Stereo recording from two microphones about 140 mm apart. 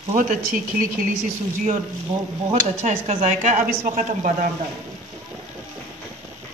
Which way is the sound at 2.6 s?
55° right (ahead or behind).